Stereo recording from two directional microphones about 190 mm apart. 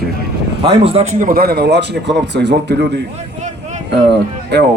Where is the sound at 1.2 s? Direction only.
50° right (ahead or behind).